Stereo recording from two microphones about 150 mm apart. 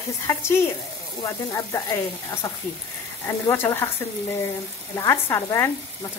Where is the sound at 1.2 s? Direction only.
20° left (ahead or behind).